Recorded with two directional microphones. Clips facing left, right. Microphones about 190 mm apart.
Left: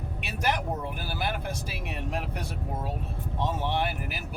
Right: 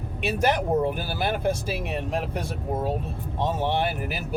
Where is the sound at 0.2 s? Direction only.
25° right (ahead or behind).